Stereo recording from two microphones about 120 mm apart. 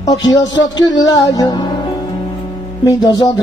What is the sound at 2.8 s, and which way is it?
Music, 35° left (ahead or behind).